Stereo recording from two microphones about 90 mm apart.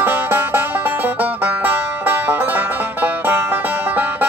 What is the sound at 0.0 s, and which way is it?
Music, 25° right (ahead or behind).